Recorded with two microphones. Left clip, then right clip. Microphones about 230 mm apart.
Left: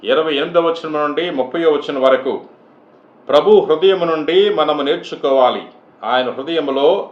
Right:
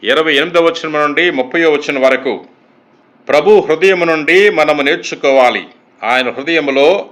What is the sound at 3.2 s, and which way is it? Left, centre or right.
A man's voice, right.